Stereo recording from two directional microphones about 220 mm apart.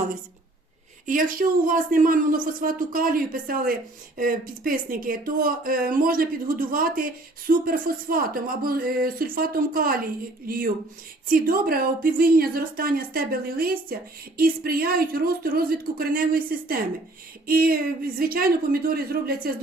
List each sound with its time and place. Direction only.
1.0 s speech: 40° right (ahead or behind)